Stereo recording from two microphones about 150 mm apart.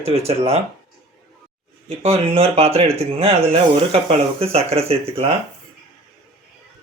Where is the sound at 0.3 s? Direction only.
40° right (ahead or behind).